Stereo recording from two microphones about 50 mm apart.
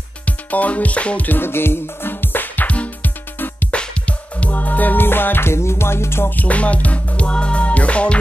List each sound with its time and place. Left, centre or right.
0.2 s music: left
5.5 s music: left
6.3 s music: left